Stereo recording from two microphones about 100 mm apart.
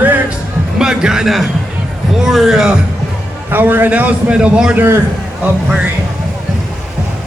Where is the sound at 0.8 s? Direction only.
5° right (ahead or behind).